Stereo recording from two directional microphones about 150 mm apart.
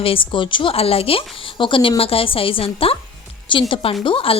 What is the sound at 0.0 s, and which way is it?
Speech, 35° left (ahead or behind).